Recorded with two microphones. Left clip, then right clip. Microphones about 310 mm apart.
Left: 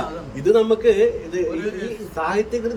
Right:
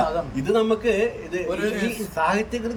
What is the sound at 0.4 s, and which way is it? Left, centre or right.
Speech, centre.